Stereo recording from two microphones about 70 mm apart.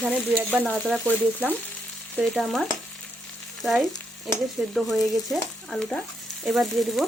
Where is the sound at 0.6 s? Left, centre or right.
Centre.